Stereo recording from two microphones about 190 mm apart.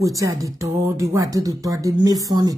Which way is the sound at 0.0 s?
15° right (ahead or behind).